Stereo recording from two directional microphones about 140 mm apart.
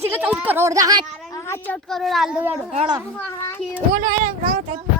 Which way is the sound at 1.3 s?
20° left (ahead or behind).